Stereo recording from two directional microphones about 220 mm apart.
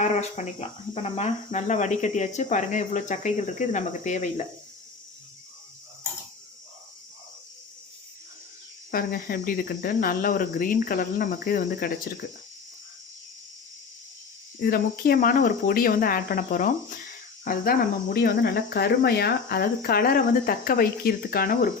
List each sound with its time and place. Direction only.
0.0 s cricket: 30° left (ahead or behind)
0.9 s speech: 30° left (ahead or behind)
8.9 s speech: 40° left (ahead or behind)
14.6 s speech: 45° left (ahead or behind)